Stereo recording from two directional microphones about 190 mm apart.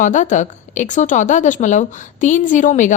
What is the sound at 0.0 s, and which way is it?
A woman's voice, 40° left (ahead or behind).